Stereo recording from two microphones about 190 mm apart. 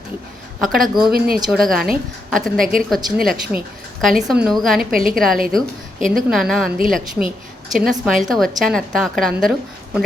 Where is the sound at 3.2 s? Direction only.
50° right (ahead or behind).